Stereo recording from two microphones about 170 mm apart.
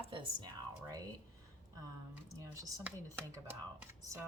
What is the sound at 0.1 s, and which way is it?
Speech, 25° right (ahead or behind).